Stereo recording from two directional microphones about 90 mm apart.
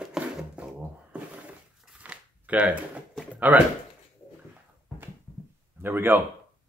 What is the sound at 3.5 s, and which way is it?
Speech, 15° right (ahead or behind).